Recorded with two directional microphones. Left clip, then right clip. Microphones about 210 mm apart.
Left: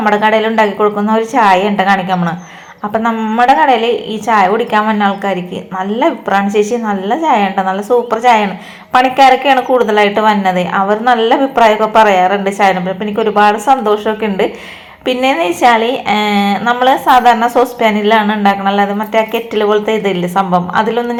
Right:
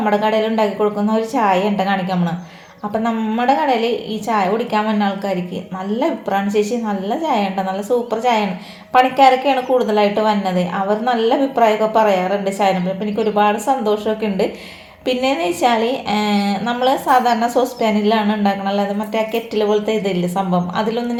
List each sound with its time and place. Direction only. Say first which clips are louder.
0.0 s a woman's voice: left 6 dB; 15° left (ahead or behind)